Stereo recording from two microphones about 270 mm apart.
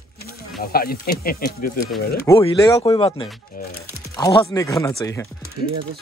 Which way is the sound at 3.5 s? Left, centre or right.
Left.